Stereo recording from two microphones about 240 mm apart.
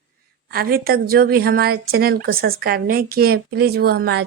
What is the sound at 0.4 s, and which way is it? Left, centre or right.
Speech, right.